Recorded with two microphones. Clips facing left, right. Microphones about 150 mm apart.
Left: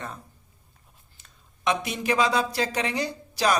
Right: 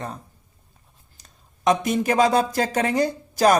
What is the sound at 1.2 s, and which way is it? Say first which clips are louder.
Speech: right 4 dB; 40° right (ahead or behind).